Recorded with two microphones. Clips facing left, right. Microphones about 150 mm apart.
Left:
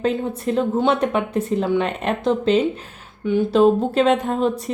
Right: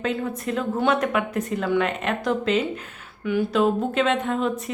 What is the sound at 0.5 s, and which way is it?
Speech, 35° left (ahead or behind).